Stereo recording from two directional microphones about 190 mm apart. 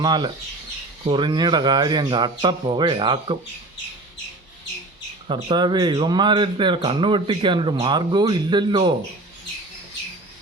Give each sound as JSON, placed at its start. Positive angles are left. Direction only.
{"t": 0.0, "sound": "speech", "side_deg": -20}
{"t": 5.3, "sound": "speech", "side_deg": -25}